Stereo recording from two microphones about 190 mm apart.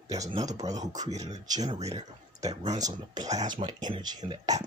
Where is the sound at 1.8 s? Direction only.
35° right (ahead or behind).